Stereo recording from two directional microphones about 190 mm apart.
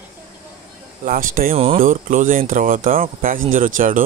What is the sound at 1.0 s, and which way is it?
Speech, 50° right (ahead or behind).